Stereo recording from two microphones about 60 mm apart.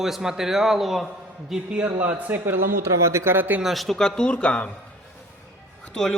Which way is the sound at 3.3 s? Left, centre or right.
Right.